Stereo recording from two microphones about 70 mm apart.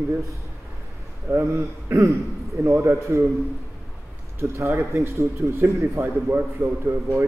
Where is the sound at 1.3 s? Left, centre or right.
Right.